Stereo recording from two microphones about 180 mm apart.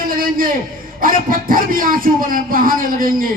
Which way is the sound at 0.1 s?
50° right (ahead or behind).